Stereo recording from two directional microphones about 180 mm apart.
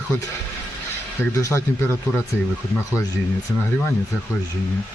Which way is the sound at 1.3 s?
15° left (ahead or behind).